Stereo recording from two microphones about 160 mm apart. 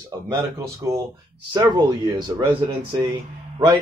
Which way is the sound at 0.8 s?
20° right (ahead or behind).